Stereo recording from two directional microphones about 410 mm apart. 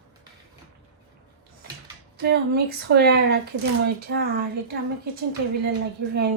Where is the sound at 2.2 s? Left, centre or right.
Right.